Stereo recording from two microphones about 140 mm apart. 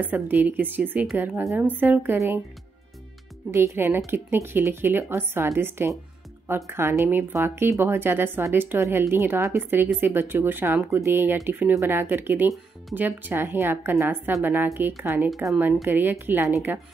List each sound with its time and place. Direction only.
0.0 s speech: 15° right (ahead or behind)
3.5 s speech: 15° right (ahead or behind)
15.2 s speech: centre (ahead or behind)
15.6 s speech: 15° right (ahead or behind)